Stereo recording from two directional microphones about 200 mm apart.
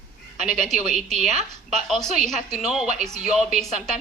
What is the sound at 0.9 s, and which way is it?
Speech, centre (ahead or behind).